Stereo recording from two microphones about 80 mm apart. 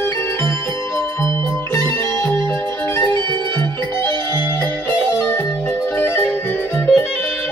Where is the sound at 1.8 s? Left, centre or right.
Left.